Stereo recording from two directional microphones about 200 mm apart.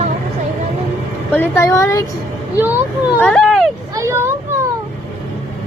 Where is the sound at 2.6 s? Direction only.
10° right (ahead or behind).